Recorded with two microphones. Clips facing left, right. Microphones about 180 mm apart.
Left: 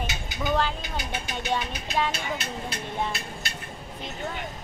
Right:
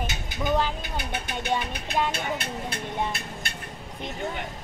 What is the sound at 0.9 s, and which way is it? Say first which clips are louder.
Speech: right 1 dB; 55° right (ahead or behind).